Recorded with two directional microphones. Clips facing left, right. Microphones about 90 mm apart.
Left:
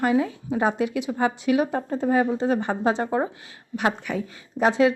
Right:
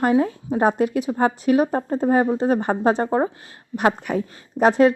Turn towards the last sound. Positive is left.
turn(degrees=-45)  # may be behind; listen again after turning